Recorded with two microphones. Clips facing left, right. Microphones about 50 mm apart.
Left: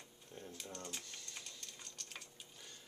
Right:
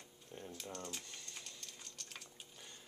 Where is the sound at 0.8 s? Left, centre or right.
Centre.